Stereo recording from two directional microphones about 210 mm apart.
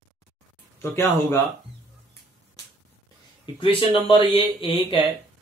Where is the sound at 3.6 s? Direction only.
25° left (ahead or behind).